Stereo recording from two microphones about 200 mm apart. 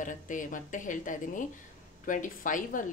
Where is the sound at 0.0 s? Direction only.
40° left (ahead or behind).